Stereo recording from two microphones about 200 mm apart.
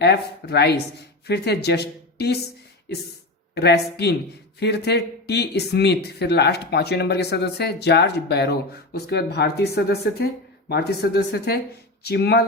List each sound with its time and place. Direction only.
0.0 s speech: 55° left (ahead or behind)
3.5 s speech: 55° left (ahead or behind)